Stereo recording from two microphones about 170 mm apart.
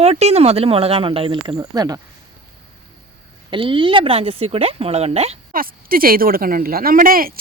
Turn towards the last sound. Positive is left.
turn(degrees=-60)  # may be behind; listen again after turning